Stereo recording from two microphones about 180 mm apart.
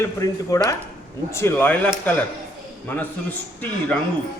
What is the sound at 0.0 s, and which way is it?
A man's voice, 20° left (ahead or behind).